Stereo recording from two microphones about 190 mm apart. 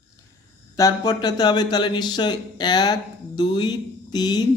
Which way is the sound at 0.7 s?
20° left (ahead or behind).